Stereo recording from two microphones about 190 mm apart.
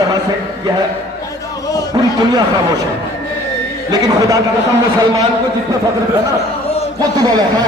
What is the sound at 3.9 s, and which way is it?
Speech, 20° right (ahead or behind).